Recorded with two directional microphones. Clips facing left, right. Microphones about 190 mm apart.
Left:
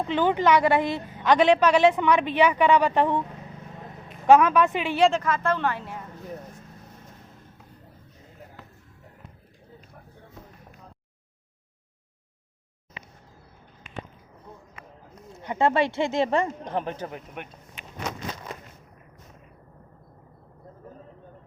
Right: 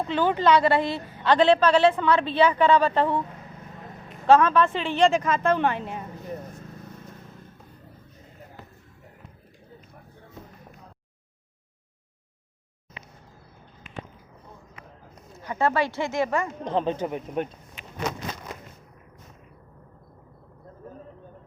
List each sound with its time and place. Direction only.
0.1 s a woman's voice: 15° left (ahead or behind)
4.3 s a woman's voice: 15° left (ahead or behind)
5.1 s a woman's voice: 20° right (ahead or behind)
15.3 s speech: 25° left (ahead or behind)
16.6 s a woman's voice: 20° right (ahead or behind)